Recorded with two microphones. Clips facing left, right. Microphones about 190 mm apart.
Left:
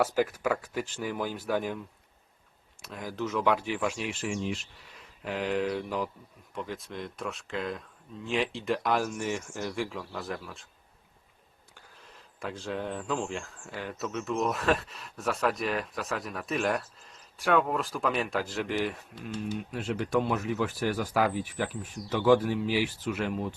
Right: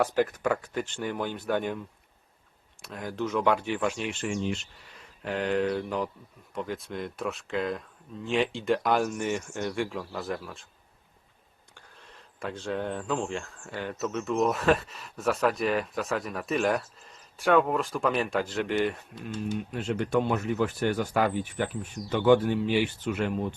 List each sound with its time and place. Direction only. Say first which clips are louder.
0.0 s speech: right 1 dB; 5° left (ahead or behind)
2.8 s speech: right 2 dB; centre (ahead or behind)
11.9 s speech: right 2 dB; centre (ahead or behind)